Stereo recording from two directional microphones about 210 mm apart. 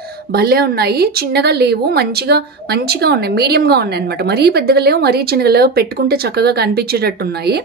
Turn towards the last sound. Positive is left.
turn(degrees=-50)  # may be behind; listen again after turning